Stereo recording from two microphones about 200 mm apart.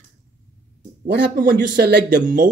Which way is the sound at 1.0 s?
50° right (ahead or behind).